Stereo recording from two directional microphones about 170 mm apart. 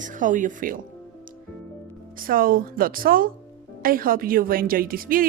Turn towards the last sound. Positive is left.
turn(degrees=-55)  # may be behind; listen again after turning